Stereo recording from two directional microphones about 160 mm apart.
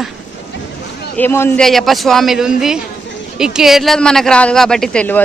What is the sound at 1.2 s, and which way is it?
Speech, 15° left (ahead or behind).